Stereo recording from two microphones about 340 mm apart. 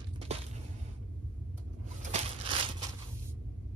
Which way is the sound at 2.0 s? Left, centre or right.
Centre.